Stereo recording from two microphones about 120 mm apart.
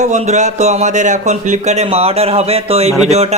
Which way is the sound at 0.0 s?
75° right (ahead or behind).